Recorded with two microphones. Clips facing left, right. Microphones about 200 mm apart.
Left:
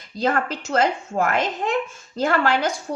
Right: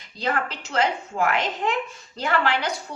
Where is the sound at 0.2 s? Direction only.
45° left (ahead or behind).